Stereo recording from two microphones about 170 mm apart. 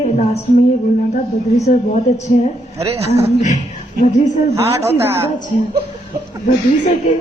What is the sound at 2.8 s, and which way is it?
Speech, 40° right (ahead or behind).